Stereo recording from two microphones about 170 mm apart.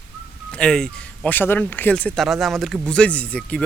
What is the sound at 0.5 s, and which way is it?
Speech, 5° left (ahead or behind).